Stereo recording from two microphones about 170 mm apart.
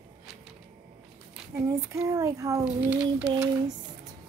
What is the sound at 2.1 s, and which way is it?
Speech, 20° right (ahead or behind).